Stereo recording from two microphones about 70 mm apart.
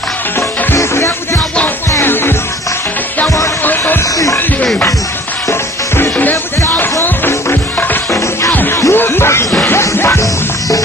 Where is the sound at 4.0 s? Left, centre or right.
Left.